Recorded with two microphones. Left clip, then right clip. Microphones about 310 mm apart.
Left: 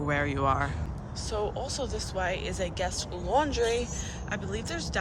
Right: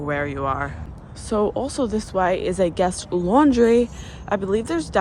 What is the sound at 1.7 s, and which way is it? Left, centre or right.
Speech, centre.